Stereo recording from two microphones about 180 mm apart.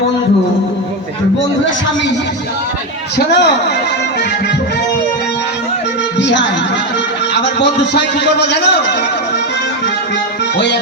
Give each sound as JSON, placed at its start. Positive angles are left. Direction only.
{"t": 3.2, "sound": "a man's voice", "side_deg": 70}
{"t": 6.1, "sound": "music", "side_deg": 80}
{"t": 7.3, "sound": "a man's voice", "side_deg": 75}